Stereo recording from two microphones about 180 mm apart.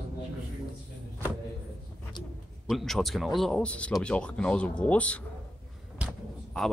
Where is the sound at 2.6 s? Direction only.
Centre (ahead or behind).